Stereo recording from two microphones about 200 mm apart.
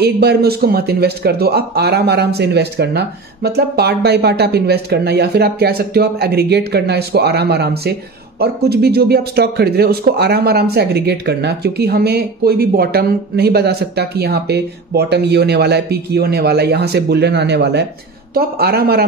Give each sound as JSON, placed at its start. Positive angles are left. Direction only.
{"t": 0.0, "sound": "speech", "side_deg": -55}